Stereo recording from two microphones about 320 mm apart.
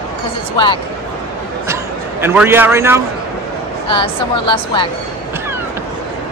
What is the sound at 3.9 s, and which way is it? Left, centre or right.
Speech, centre.